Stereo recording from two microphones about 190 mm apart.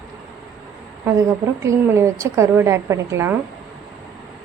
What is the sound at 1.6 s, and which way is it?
A woman's voice, 15° right (ahead or behind).